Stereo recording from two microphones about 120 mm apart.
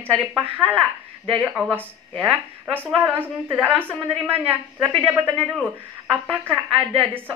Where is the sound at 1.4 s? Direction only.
5° right (ahead or behind).